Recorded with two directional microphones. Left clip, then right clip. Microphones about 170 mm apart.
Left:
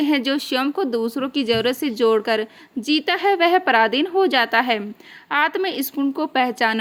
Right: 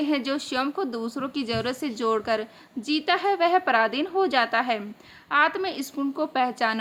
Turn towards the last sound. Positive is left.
turn(degrees=35)  # may be behind; listen again after turning